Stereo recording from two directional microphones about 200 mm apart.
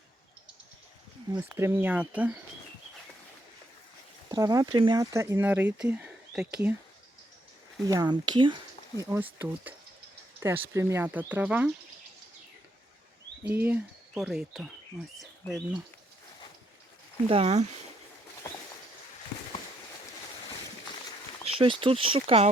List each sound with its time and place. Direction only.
1.4 s speech: 10° right (ahead or behind)
4.3 s speech: 20° right (ahead or behind)
7.9 s speech: 20° right (ahead or behind)
13.5 s speech: 10° right (ahead or behind)
17.2 s speech: 30° right (ahead or behind)
21.4 s speech: 25° right (ahead or behind)